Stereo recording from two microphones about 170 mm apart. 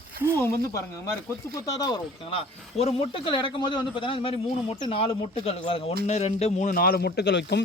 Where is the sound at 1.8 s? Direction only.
30° left (ahead or behind).